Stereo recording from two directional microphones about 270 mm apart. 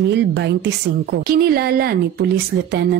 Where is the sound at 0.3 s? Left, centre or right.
Right.